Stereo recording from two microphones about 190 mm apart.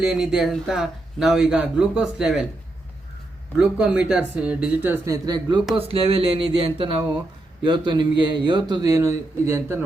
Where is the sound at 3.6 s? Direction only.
5° right (ahead or behind).